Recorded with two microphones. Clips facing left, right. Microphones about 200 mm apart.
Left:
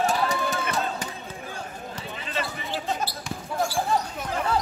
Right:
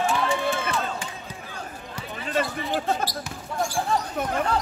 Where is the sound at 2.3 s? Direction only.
50° right (ahead or behind).